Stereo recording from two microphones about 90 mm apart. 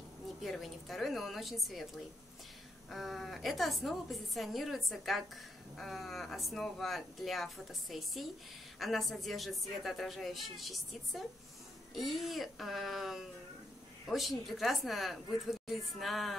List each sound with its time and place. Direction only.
0.4 s speech: centre (ahead or behind)
2.9 s speech: centre (ahead or behind)